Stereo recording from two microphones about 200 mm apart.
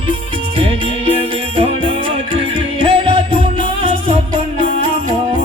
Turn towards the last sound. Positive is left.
turn(degrees=-25)  # may be behind; listen again after turning